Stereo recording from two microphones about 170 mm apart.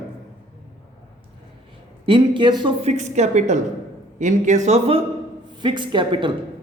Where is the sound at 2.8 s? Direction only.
40° right (ahead or behind).